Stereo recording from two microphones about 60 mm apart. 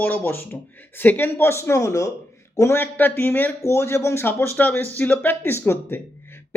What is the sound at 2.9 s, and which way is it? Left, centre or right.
Speech, left.